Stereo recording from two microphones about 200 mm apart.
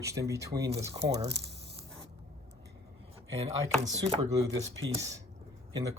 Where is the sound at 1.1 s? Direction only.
60° right (ahead or behind).